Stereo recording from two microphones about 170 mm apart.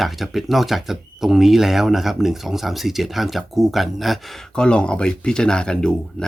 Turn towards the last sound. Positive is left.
turn(degrees=5)  # may be behind; listen again after turning